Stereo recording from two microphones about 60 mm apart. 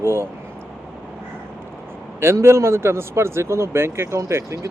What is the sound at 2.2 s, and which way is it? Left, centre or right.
Speech, right.